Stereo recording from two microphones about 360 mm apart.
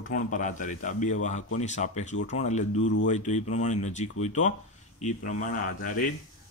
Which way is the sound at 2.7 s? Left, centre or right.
Left.